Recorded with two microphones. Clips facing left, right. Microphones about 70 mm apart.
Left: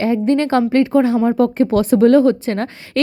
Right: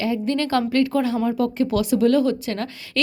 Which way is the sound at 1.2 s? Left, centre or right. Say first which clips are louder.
Left 6 dB; left.